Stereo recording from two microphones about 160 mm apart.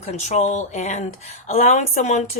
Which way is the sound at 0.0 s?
45° left (ahead or behind).